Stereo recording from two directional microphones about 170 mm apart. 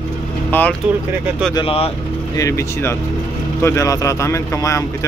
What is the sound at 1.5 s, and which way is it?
Speech, 35° left (ahead or behind).